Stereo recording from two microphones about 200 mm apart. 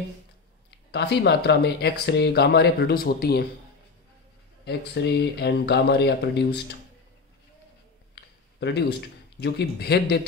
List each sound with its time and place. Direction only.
0.7 s speech: 55° left (ahead or behind)
4.6 s speech: 60° left (ahead or behind)
8.1 s a sound: 60° left (ahead or behind)
9.4 s speech: 55° left (ahead or behind)